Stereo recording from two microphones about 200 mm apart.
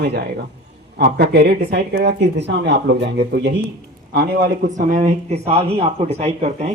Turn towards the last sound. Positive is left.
turn(degrees=-35)  # may be behind; listen again after turning